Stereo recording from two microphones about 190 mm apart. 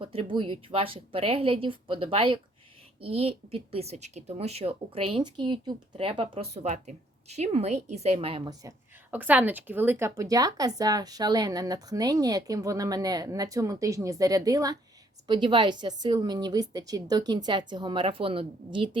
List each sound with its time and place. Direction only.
0.0 s a woman's voice: 30° right (ahead or behind)
8.6 s a woman's voice: 10° right (ahead or behind); by 18.9 s 25° right (ahead or behind)